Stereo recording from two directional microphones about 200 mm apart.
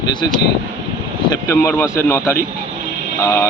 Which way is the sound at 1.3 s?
15° left (ahead or behind).